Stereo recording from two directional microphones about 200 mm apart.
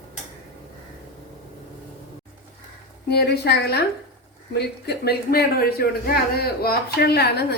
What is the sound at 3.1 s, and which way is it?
A woman's voice, 55° left (ahead or behind).